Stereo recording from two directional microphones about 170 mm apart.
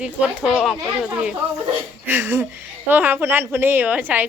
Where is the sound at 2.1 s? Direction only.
10° right (ahead or behind).